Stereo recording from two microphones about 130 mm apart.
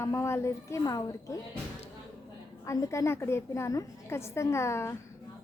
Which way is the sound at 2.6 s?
25° left (ahead or behind).